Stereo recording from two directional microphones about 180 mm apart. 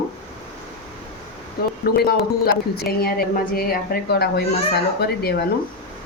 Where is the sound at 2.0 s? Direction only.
60° left (ahead or behind).